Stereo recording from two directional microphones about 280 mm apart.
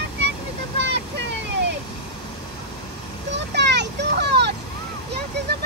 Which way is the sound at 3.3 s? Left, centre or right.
Right.